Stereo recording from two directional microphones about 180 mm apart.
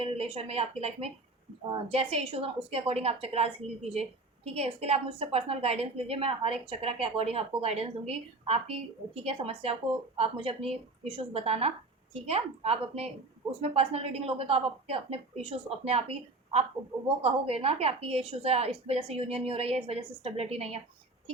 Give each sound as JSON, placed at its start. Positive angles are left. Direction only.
{"t": 0.0, "sound": "a woman's voice", "side_deg": -35}